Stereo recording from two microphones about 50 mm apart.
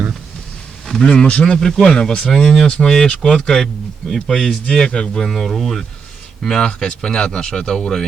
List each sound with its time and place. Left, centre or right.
0.9 s speech: centre
1.1 s speech: left
1.5 s speech: centre
2.2 s speech: centre
2.6 s speech: centre